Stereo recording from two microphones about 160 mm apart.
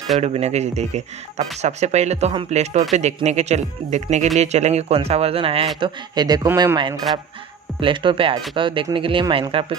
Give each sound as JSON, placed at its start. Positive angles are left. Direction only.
{"t": 0.2, "sound": "speech", "side_deg": -45}
{"t": 5.8, "sound": "a man's voice", "side_deg": -25}